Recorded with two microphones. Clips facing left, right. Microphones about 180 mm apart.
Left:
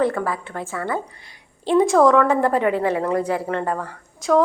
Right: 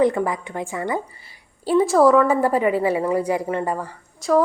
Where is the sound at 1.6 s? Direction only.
5° right (ahead or behind).